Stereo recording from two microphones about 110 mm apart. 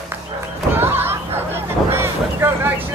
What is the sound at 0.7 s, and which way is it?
Slam, 20° right (ahead or behind).